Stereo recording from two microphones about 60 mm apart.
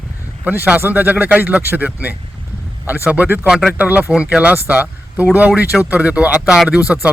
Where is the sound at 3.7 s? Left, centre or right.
Right.